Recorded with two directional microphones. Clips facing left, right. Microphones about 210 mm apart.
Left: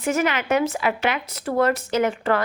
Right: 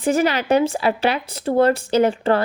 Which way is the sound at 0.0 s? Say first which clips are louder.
Right 4 dB; 30° right (ahead or behind).